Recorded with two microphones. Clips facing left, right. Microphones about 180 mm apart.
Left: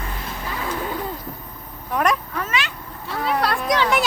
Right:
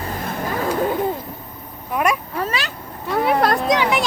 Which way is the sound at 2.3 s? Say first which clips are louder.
Right 2 dB; 35° right (ahead or behind).